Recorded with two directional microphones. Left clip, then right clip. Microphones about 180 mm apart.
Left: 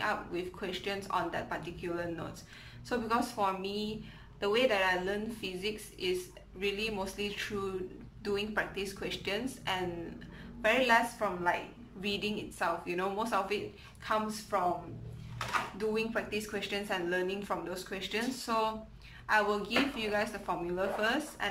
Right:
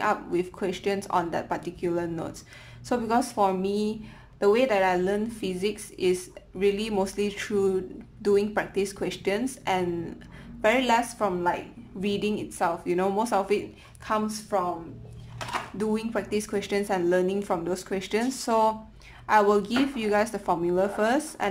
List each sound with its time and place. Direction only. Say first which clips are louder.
0.0 s speech: right 8 dB; 35° right (ahead or behind)